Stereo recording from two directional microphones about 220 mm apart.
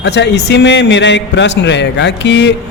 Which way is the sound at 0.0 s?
50° left (ahead or behind).